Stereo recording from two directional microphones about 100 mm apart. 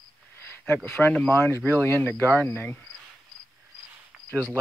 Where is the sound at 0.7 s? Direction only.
20° left (ahead or behind).